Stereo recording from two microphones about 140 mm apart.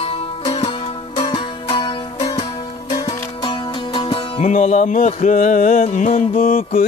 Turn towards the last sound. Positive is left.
turn(degrees=80)